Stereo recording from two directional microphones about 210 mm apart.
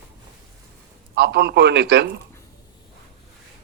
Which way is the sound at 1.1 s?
50° right (ahead or behind).